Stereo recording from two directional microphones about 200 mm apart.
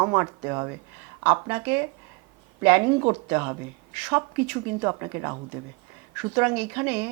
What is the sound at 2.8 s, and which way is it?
Speech, 25° right (ahead or behind).